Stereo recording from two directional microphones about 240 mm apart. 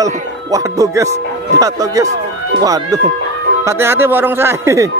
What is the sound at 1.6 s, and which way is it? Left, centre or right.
Music, centre.